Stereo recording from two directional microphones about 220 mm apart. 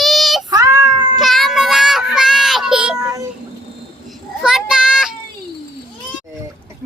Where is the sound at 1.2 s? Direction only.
Centre (ahead or behind).